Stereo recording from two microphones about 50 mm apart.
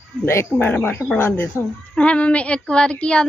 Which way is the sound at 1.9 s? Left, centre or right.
Left.